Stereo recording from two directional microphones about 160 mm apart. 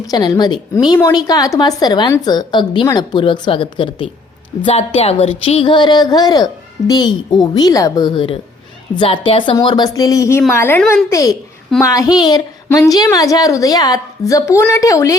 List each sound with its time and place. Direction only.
0.1 s a child's voice: 25° left (ahead or behind)